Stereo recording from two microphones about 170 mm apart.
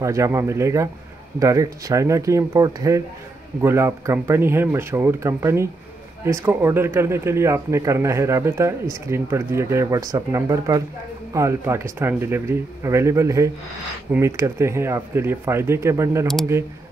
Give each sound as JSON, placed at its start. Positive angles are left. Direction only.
{"t": 0.0, "sound": "speech", "side_deg": -15}